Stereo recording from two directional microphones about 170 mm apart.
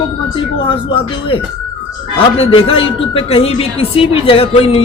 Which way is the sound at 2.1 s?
35° left (ahead or behind).